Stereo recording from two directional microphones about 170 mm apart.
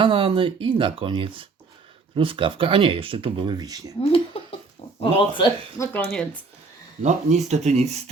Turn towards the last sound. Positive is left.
turn(degrees=-40)  # may be behind; listen again after turning